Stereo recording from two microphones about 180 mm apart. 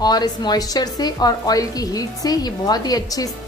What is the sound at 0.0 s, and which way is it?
A woman's voice, 20° left (ahead or behind).